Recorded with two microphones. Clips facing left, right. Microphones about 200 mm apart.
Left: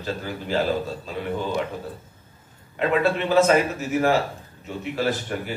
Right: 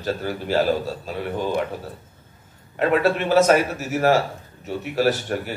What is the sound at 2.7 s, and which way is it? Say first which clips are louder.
Speech: right 2 dB; 45° right (ahead or behind).